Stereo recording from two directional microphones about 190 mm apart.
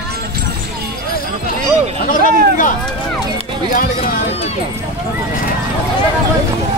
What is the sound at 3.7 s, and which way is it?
Speech, 45° left (ahead or behind).